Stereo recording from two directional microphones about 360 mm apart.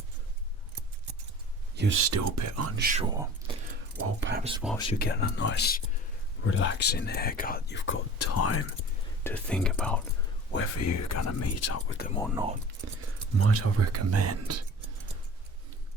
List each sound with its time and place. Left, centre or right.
1.7 s speech: right
2.7 s speech: right
3.9 s speech: right
4.8 s speech: left
8.2 s speech: left
9.2 s speech: centre
10.5 s speech: left
10.8 s speech: left
12.3 s speech: centre
12.8 s speech: right